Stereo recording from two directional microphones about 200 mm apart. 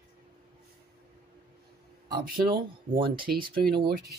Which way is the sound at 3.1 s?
45° right (ahead or behind).